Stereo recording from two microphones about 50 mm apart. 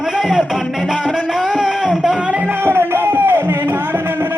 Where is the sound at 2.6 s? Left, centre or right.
Right.